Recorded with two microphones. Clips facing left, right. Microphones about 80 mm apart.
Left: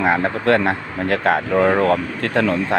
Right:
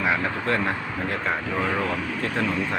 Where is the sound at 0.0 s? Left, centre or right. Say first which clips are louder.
Left 7 dB; left.